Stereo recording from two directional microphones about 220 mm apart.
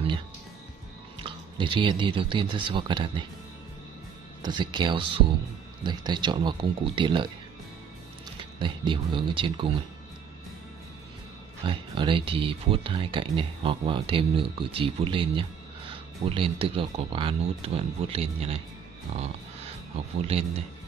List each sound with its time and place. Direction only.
1.2 s speech: 20° right (ahead or behind)
4.4 s speech: 20° right (ahead or behind)
8.5 s speech: 20° right (ahead or behind)
11.6 s speech: 25° right (ahead or behind)
20.2 s speech: 30° right (ahead or behind)